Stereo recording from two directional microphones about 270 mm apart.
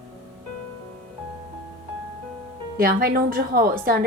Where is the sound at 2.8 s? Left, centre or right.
Right.